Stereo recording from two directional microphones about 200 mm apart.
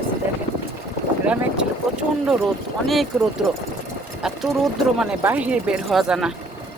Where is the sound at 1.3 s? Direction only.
5° right (ahead or behind).